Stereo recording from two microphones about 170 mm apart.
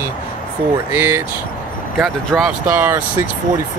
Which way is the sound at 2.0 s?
5° right (ahead or behind).